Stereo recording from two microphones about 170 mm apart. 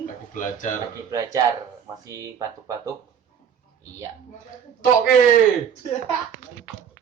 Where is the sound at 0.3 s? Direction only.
50° left (ahead or behind).